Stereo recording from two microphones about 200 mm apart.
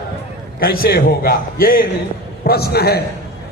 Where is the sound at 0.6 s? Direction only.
50° left (ahead or behind).